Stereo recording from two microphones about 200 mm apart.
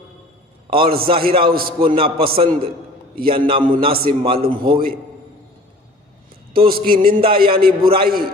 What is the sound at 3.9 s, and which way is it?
Speech, 50° right (ahead or behind).